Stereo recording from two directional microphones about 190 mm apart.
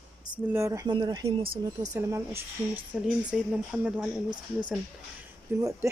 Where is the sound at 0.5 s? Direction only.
15° right (ahead or behind).